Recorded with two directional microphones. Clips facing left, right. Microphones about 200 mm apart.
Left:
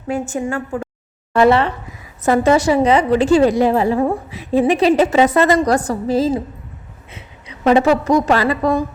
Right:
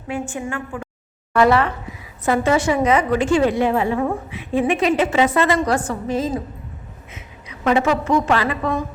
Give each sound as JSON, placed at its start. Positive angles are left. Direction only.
{"t": 0.1, "sound": "a woman's voice", "side_deg": 40}
{"t": 1.3, "sound": "speech", "side_deg": 25}
{"t": 2.2, "sound": "a woman's voice", "side_deg": 40}